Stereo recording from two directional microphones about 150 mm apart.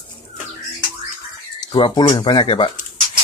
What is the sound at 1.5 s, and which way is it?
Speech, 30° left (ahead or behind).